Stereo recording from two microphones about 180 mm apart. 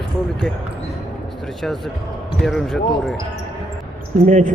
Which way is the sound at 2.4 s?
Centre (ahead or behind).